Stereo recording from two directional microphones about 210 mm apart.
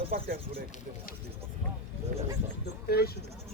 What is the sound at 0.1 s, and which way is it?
Speech, 45° right (ahead or behind).